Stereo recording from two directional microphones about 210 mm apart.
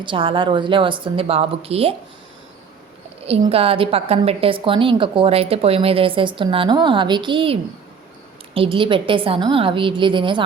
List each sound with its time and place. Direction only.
0.0 s a woman's voice: 25° right (ahead or behind)
3.2 s a woman's voice: 25° right (ahead or behind)